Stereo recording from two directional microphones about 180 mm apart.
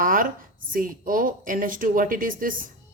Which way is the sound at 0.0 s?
50° right (ahead or behind).